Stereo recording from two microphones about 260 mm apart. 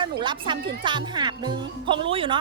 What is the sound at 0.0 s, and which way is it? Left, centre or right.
Speech, centre.